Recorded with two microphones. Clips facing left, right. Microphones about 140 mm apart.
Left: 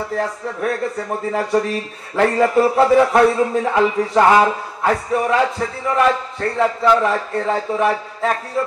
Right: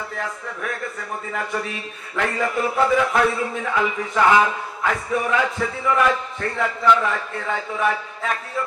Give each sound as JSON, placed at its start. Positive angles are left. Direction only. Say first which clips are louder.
{"t": 0.2, "sound": "a man's voice", "louder": "left 7 dB", "side_deg": 35}